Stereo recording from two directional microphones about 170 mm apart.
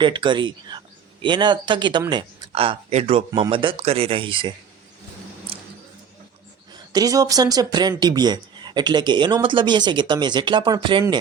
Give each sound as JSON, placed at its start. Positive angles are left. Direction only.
{"t": 0.0, "sound": "speech", "side_deg": -25}
{"t": 6.7, "sound": "speech", "side_deg": -20}